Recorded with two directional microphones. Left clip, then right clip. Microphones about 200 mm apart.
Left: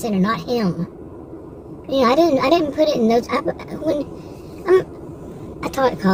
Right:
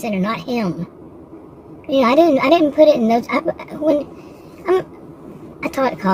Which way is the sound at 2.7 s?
25° right (ahead or behind).